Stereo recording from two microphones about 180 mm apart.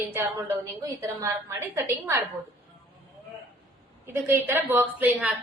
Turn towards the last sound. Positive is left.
turn(degrees=-10)  # may be behind; listen again after turning